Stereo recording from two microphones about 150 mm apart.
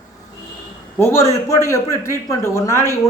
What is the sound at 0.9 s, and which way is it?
A man's voice, 15° left (ahead or behind).